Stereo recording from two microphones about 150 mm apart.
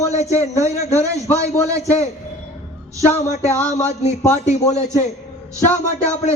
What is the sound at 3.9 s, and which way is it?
Speech, 45° left (ahead or behind).